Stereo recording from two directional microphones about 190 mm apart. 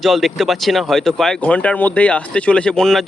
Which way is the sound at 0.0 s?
Centre (ahead or behind).